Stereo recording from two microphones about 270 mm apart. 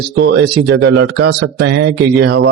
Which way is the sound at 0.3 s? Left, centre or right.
Right.